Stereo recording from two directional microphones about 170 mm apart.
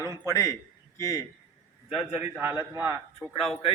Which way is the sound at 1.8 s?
10° right (ahead or behind).